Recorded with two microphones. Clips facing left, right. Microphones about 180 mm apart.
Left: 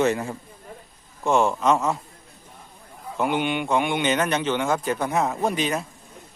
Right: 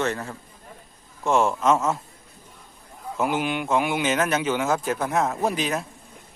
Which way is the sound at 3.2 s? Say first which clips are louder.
Left 1 dB; centre (ahead or behind).